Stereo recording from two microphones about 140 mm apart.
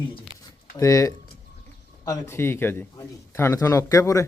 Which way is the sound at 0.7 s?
25° left (ahead or behind).